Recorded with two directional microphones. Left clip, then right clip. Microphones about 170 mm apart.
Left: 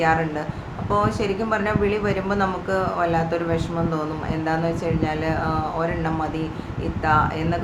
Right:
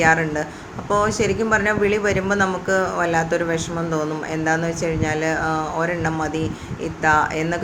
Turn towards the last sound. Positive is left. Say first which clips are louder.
# right 3 dB
turn(degrees=-20)  # may be behind; listen again after turning